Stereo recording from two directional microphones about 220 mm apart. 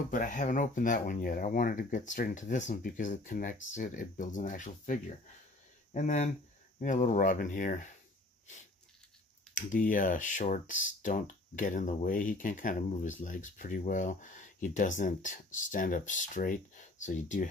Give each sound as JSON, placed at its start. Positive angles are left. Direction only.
{"t": 0.1, "sound": "speech", "side_deg": 35}
{"t": 9.5, "sound": "speech", "side_deg": 35}